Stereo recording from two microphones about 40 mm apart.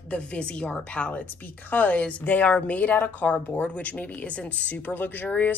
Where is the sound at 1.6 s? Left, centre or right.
Left.